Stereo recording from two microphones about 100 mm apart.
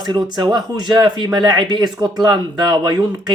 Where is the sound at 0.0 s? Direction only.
45° right (ahead or behind).